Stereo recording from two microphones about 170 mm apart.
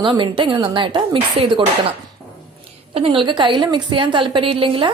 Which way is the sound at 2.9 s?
30° right (ahead or behind).